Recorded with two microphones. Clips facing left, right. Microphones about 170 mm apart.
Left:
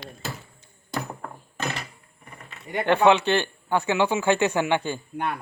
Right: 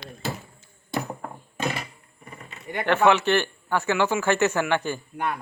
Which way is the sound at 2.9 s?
15° left (ahead or behind).